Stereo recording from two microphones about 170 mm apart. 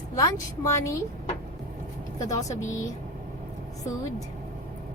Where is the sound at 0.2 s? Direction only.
20° left (ahead or behind).